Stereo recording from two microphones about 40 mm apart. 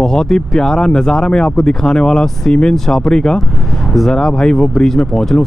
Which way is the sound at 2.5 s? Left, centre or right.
Centre.